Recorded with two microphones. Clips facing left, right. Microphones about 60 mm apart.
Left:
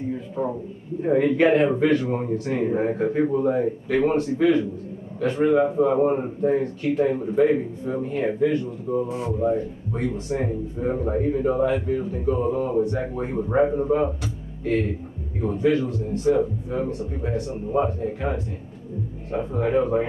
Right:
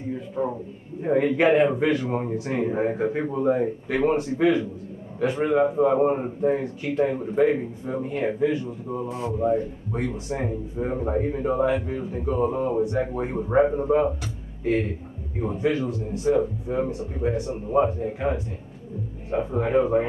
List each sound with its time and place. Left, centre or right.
0.4 s a man's voice: centre
15.4 s a man's voice: centre